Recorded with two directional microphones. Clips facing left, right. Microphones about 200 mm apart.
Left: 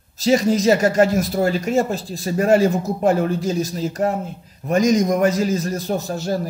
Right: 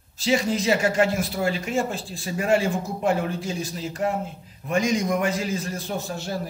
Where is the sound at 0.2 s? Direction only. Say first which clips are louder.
Left 6 dB; 40° left (ahead or behind).